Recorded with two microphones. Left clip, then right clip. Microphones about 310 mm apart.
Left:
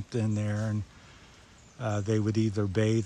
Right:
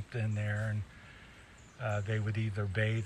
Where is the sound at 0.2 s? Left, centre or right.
Left.